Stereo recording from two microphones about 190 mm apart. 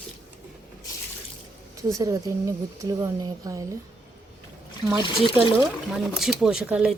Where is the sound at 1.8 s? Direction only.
15° right (ahead or behind).